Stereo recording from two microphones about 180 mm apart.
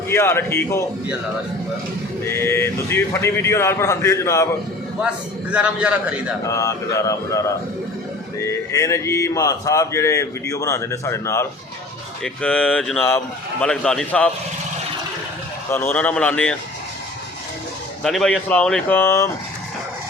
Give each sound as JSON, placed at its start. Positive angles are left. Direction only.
{"t": 0.1, "sound": "speech", "side_deg": 15}
{"t": 2.2, "sound": "speech", "side_deg": 15}
{"t": 4.9, "sound": "a man's voice", "side_deg": -5}
{"t": 6.4, "sound": "a man's voice", "side_deg": 15}
{"t": 15.7, "sound": "speech", "side_deg": 10}
{"t": 18.0, "sound": "speech", "side_deg": 5}